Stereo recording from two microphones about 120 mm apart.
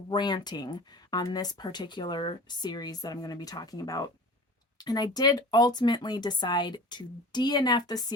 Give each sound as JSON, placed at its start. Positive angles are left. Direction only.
{"t": 0.1, "sound": "speech", "side_deg": 35}